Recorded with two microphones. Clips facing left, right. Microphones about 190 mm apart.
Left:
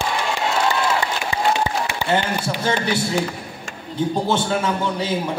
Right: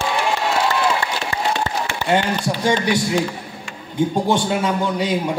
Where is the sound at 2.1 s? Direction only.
15° right (ahead or behind).